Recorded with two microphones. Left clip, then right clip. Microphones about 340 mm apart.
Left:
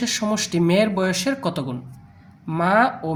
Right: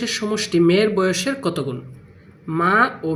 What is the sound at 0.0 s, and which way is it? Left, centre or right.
Speech, left.